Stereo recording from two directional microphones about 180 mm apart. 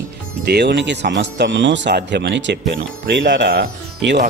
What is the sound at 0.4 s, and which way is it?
Speech, 70° right (ahead or behind).